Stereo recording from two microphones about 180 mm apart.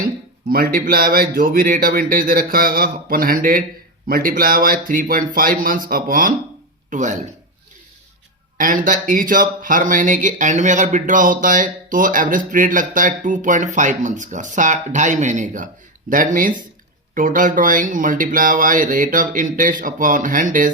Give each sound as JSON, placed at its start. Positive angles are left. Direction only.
{"t": 0.0, "sound": "speech", "side_deg": -55}
{"t": 8.5, "sound": "speech", "side_deg": -50}